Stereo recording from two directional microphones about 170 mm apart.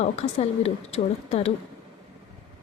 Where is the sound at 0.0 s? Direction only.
40° left (ahead or behind).